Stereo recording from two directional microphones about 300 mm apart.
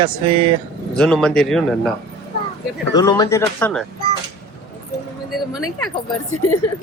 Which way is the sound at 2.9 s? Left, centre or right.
Centre.